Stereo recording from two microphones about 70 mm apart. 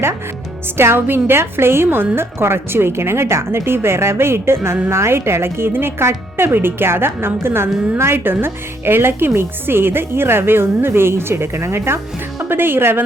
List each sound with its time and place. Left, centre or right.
0.8 s a woman's voice: right